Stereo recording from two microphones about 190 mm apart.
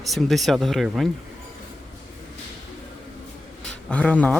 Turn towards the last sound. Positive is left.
turn(degrees=5)  # may be behind; listen again after turning